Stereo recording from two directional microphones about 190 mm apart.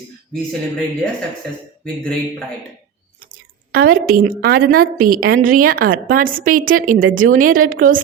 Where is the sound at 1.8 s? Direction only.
5° left (ahead or behind).